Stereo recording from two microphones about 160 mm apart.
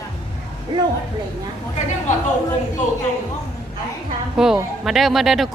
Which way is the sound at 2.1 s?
50° left (ahead or behind).